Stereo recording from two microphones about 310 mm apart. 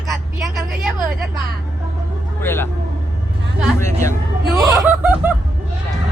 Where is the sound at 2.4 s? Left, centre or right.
Centre.